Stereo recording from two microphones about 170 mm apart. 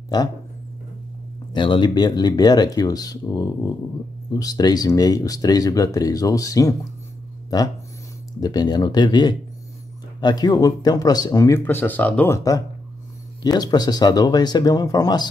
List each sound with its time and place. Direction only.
0.1 s speech: 25° left (ahead or behind)
1.5 s speech: 25° left (ahead or behind); by 12.4 s 10° left (ahead or behind)
13.4 s speech: 25° left (ahead or behind)